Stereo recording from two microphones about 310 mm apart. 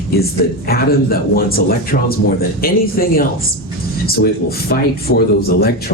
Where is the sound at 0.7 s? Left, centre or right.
Left.